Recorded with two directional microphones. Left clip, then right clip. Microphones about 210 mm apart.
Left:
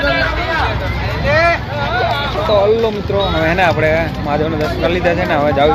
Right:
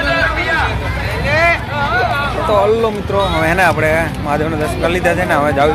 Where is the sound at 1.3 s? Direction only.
25° left (ahead or behind).